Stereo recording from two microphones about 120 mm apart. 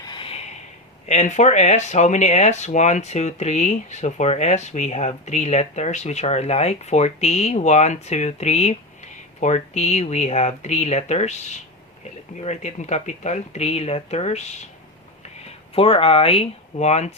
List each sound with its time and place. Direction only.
0.0 s a sound: 40° left (ahead or behind)
1.0 s speech: 80° left
15.7 s speech: 50° left (ahead or behind); by 17.2 s 65° left (ahead or behind)